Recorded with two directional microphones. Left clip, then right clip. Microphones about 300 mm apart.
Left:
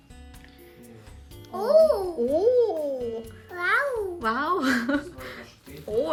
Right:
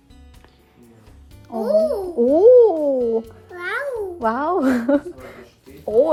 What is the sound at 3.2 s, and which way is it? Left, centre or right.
Babbling, centre.